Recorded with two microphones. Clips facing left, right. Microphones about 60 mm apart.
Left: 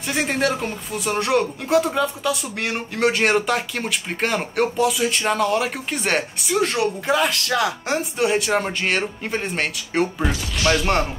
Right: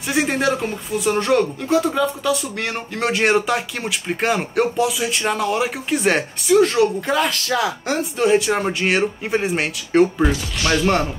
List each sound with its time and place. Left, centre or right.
0.1 s speech: centre